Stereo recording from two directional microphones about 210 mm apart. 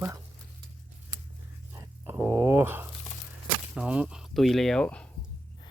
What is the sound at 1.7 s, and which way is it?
Speech, 10° right (ahead or behind).